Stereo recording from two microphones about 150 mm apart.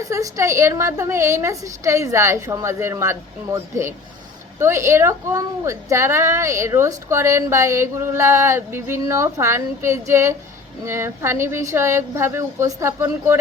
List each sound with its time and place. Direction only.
0.0 s a woman's voice: 20° right (ahead or behind)